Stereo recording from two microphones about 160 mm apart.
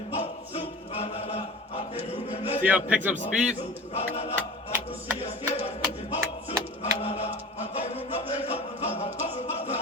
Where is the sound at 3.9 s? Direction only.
40° left (ahead or behind).